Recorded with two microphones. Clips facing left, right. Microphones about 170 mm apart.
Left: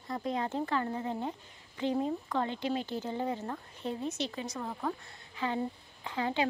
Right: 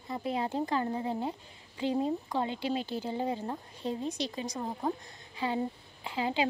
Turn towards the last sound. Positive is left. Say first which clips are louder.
# right 1 dB
turn(degrees=-15)  # may be behind; listen again after turning